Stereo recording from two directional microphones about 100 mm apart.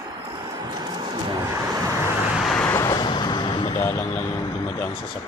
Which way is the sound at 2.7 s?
35° left (ahead or behind).